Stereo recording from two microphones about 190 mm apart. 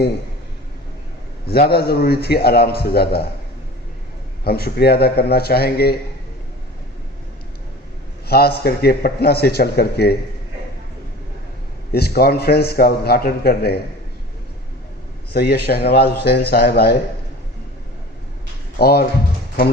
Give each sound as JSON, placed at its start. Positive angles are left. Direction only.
{"t": 1.5, "sound": "a man's voice", "side_deg": 55}
{"t": 4.4, "sound": "a man's voice", "side_deg": 55}
{"t": 8.3, "sound": "a man's voice", "side_deg": 55}
{"t": 11.9, "sound": "a man's voice", "side_deg": 55}
{"t": 15.3, "sound": "a man's voice", "side_deg": 55}
{"t": 18.8, "sound": "a man's voice", "side_deg": 55}